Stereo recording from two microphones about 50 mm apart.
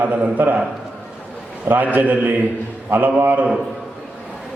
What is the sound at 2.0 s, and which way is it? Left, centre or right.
A man's voice, right.